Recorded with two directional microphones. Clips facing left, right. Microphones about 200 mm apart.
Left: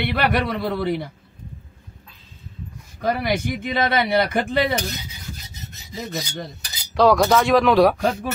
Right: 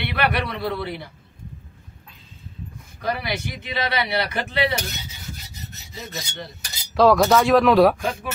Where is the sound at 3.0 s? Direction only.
50° left (ahead or behind).